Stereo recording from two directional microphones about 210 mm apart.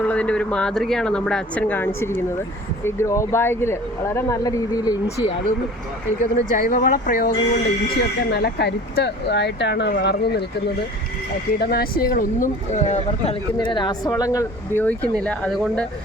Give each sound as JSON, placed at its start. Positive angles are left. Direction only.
{"t": 0.0, "sound": "speech", "side_deg": 5}
{"t": 6.5, "sound": "speech", "side_deg": 40}
{"t": 11.6, "sound": "speech", "side_deg": 45}